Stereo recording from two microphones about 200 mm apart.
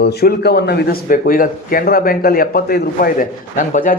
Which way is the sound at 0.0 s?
55° left (ahead or behind).